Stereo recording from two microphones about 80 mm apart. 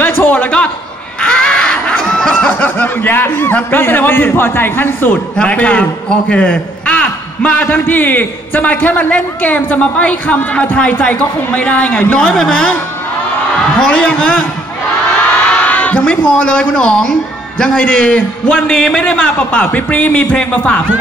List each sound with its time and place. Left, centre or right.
0.2 s a man's voice: centre
1.2 s a sound: centre
2.6 s a man's voice: left
5.4 s a man's voice: centre
13.7 s a man's voice: centre
15.6 s a man's voice: centre